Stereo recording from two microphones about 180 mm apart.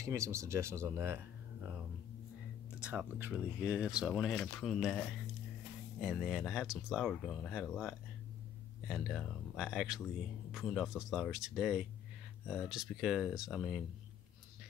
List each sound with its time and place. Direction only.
0.0 s speech: 15° right (ahead or behind)
2.7 s speech: 5° right (ahead or behind)